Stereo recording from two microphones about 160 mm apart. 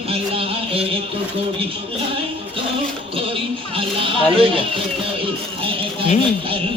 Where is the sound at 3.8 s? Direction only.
35° right (ahead or behind).